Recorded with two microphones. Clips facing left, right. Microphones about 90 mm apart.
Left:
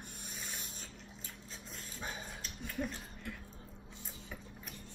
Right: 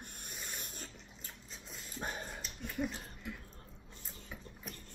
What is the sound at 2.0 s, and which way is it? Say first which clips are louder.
Dog: right 3 dB; 50° right (ahead or behind).